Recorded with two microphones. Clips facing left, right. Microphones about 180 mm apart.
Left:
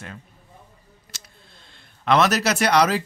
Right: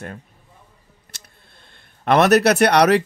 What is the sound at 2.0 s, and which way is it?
Speech, 60° right (ahead or behind).